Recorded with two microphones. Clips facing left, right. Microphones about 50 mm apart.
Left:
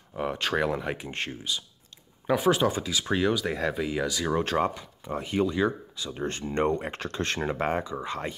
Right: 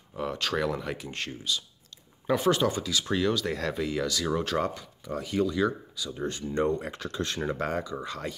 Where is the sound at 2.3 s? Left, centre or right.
Centre; by 7.4 s left.